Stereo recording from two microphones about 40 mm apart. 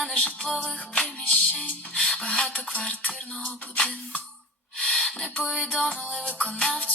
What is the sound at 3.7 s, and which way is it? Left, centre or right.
Music, left.